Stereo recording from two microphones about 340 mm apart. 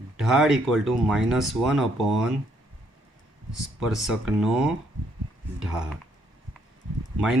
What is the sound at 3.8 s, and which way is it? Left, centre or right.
Speech, centre.